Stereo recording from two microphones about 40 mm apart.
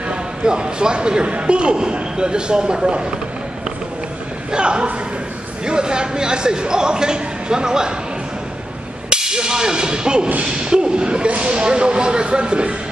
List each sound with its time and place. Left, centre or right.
0.1 s a man's voice: right
4.5 s a man's voice: right
9.1 s a man's voice: centre